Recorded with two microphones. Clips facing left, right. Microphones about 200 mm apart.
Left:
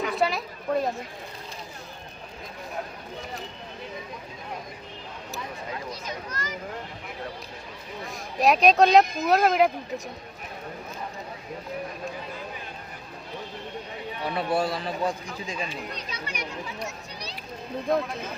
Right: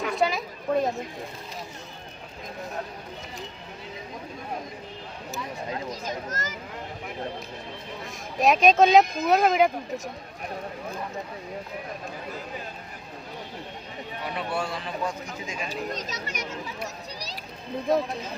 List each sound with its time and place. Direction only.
0.0 s a sound: centre (ahead or behind)
5.9 s a child's voice: 45° right (ahead or behind)
8.4 s speech: centre (ahead or behind)
14.3 s a man's voice: 35° left (ahead or behind)
15.7 s speech: 40° right (ahead or behind)